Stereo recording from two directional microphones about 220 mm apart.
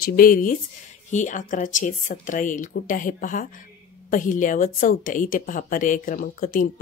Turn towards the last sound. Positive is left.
turn(degrees=40)  # may be behind; listen again after turning